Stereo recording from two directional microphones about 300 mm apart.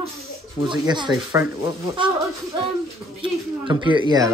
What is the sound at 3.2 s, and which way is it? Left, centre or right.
Speech, centre.